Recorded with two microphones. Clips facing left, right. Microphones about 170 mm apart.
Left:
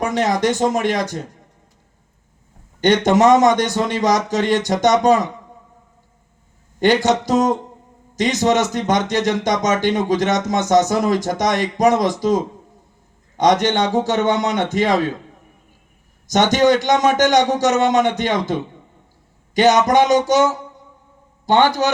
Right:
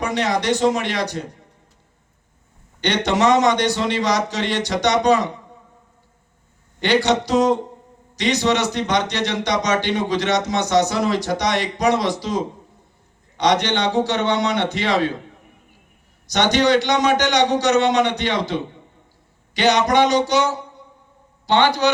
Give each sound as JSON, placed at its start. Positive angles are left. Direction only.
{"t": 0.0, "sound": "a man's voice", "side_deg": 45}
{"t": 2.8, "sound": "a man's voice", "side_deg": 45}
{"t": 6.7, "sound": "a man's voice", "side_deg": 45}
{"t": 16.2, "sound": "a man's voice", "side_deg": 45}